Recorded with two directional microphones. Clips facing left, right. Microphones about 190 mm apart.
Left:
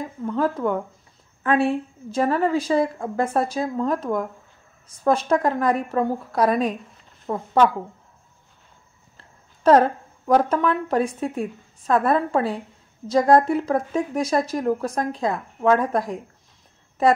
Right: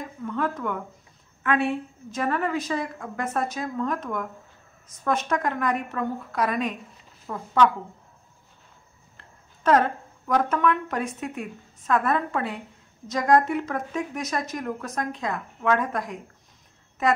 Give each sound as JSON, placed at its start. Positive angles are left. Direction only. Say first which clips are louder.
{"t": 0.0, "sound": "speech", "louder": "left 5 dB", "side_deg": 35}
{"t": 9.1, "sound": "speech", "louder": "even", "side_deg": 35}